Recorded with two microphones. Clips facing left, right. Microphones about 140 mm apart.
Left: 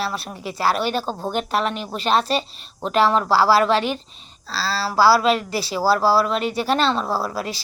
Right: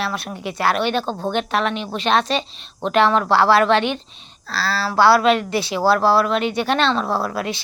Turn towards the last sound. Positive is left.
turn(degrees=5)  # may be behind; listen again after turning